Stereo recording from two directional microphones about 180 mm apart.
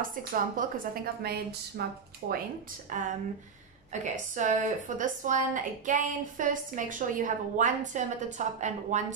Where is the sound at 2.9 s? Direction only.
45° right (ahead or behind).